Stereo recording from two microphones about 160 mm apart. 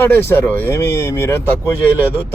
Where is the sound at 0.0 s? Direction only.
15° left (ahead or behind).